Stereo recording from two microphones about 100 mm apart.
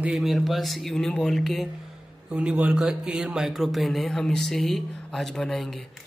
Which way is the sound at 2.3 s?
10° right (ahead or behind).